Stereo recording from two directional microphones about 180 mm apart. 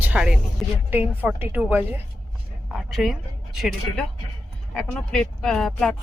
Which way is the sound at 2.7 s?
Centre (ahead or behind).